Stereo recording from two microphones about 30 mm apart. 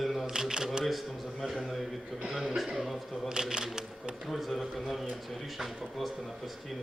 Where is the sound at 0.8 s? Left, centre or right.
Centre.